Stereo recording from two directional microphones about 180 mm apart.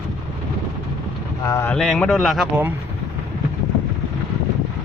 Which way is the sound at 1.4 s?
15° left (ahead or behind).